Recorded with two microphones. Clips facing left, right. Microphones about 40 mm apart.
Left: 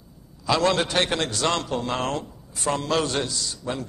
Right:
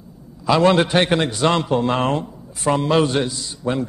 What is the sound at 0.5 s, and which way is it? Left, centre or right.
A man's voice, centre.